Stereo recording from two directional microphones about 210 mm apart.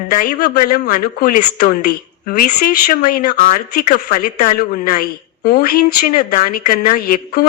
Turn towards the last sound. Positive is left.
turn(degrees=45)  # may be behind; listen again after turning